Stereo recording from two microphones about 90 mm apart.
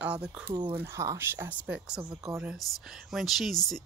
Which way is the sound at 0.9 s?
40° right (ahead or behind).